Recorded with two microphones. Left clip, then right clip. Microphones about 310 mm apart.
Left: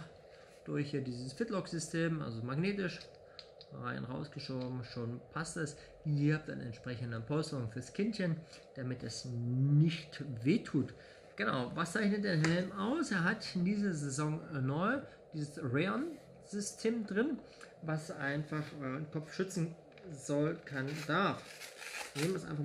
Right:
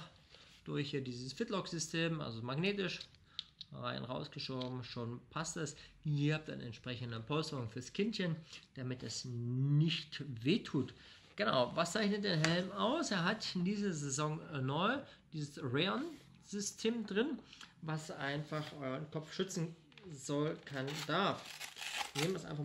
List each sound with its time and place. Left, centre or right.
0.7 s speech: centre